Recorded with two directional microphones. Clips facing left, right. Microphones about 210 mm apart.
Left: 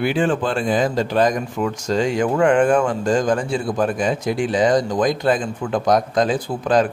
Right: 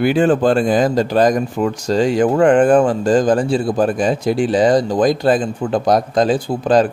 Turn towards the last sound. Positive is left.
turn(degrees=-30)  # may be behind; listen again after turning